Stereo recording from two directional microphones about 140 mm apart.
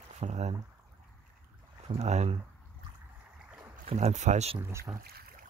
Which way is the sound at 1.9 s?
55° right (ahead or behind).